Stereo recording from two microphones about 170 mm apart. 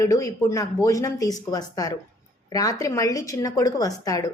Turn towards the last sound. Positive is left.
turn(degrees=20)  # may be behind; listen again after turning